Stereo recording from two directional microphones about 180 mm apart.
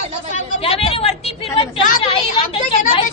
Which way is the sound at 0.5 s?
30° left (ahead or behind).